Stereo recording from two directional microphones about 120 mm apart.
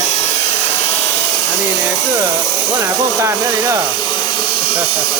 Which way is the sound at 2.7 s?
25° right (ahead or behind).